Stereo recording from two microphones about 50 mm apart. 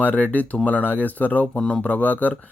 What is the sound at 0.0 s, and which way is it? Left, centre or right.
Speech, left.